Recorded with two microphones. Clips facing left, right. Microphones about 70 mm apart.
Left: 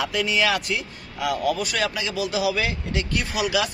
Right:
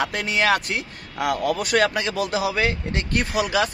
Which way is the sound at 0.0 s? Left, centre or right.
Right.